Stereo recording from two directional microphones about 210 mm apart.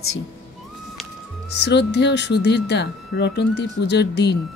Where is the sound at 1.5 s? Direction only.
55° left (ahead or behind).